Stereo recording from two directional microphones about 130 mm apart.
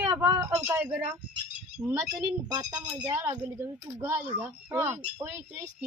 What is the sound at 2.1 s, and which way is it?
Speech, 30° right (ahead or behind).